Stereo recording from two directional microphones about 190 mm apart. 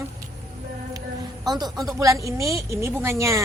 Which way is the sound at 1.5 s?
20° right (ahead or behind).